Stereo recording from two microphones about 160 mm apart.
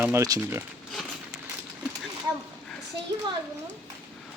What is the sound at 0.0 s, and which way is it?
Speech, 20° right (ahead or behind).